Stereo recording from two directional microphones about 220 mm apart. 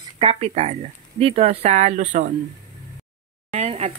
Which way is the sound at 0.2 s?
25° right (ahead or behind).